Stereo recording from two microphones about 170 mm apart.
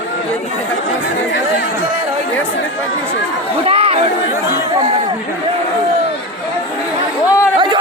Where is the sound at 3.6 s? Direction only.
35° right (ahead or behind).